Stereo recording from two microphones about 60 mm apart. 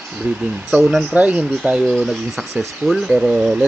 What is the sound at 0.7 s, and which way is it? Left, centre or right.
Speech, centre.